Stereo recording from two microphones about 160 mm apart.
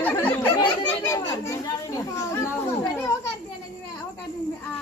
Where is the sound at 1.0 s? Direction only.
20° left (ahead or behind).